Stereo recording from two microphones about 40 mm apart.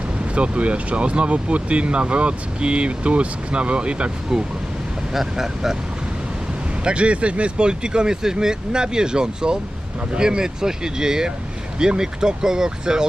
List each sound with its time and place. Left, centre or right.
0.3 s speech: right
5.1 s speech: centre
6.8 s speech: right